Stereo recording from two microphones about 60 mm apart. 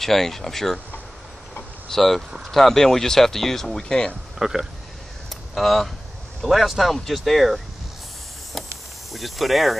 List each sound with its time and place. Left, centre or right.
0.0 s speech: centre
1.9 s speech: centre
4.4 s speech: centre
5.3 s a sound: centre
6.4 s speech: centre
9.1 s speech: centre